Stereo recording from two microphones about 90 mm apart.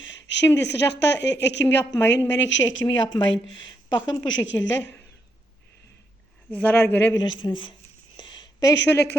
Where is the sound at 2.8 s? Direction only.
55° left (ahead or behind).